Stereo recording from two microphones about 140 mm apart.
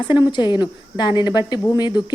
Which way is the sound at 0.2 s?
35° left (ahead or behind).